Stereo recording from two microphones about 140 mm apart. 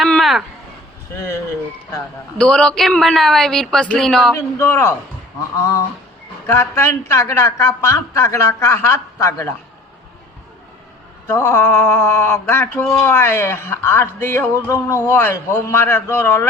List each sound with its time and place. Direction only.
0.0 s a sound: centre (ahead or behind)
1.1 s a woman's voice: 20° left (ahead or behind)
2.4 s speech: 5° left (ahead or behind)
4.4 s a woman's voice: 20° left (ahead or behind)
11.3 s mantra: 15° left (ahead or behind)